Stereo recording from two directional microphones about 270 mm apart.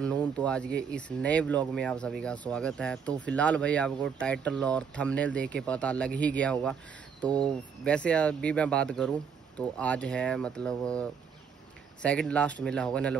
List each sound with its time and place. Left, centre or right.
0.0 s speech: centre
7.2 s speech: centre
7.8 s speech: centre